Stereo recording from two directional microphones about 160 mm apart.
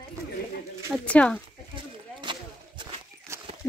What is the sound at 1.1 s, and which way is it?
Speech, 10° left (ahead or behind).